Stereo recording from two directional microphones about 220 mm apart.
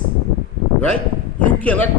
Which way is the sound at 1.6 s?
5° left (ahead or behind).